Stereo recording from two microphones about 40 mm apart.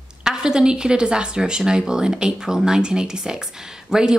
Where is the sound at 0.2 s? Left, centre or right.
Centre.